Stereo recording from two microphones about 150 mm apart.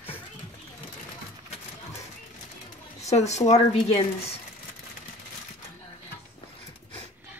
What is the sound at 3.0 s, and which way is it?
A woman's voice, 45° left (ahead or behind).